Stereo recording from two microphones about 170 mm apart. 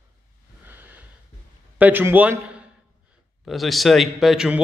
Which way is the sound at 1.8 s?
10° right (ahead or behind).